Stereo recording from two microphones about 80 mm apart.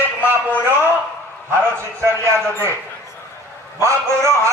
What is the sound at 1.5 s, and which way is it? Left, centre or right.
Speech, right.